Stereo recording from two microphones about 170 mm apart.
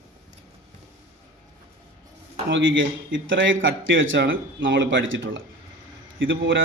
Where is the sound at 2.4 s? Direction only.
90° right.